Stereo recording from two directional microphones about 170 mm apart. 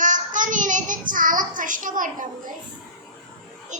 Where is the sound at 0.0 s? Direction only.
50° right (ahead or behind).